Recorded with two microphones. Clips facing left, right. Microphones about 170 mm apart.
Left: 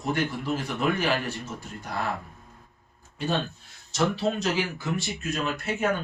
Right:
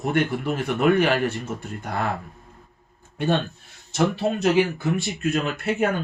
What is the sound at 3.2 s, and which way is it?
Speech, 55° right (ahead or behind).